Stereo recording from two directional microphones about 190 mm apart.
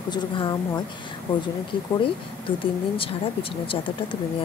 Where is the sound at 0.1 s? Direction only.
25° left (ahead or behind).